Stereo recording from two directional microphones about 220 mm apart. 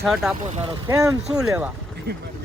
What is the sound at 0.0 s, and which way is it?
Speech, centre (ahead or behind).